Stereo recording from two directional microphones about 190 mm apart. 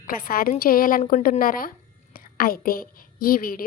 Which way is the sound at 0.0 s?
50° left (ahead or behind).